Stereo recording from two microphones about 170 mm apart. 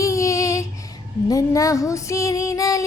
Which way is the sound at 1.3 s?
20° left (ahead or behind).